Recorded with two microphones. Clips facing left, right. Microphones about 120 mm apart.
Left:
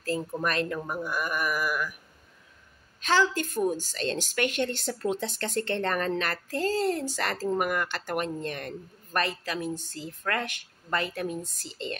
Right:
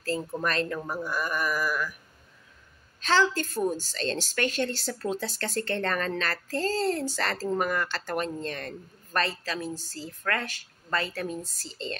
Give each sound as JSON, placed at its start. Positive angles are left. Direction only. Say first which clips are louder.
{"t": 0.4, "sound": "a woman's voice", "louder": "even", "side_deg": 10}
{"t": 3.0, "sound": "a woman's voice", "louder": "even", "side_deg": 15}